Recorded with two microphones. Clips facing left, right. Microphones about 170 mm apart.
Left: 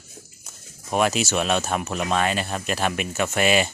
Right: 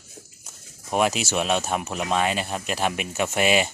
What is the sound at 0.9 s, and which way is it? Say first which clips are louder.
Speech: left 1 dB; 15° right (ahead or behind).